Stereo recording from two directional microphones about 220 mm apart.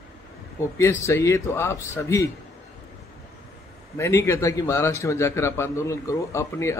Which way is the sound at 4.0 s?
10° left (ahead or behind).